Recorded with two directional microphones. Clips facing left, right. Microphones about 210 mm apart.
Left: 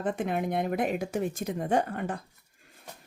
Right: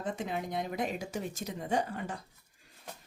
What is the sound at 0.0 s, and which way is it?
Speech, 55° left (ahead or behind).